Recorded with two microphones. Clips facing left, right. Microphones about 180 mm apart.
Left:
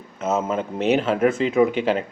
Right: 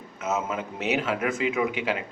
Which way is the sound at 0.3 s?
30° left (ahead or behind).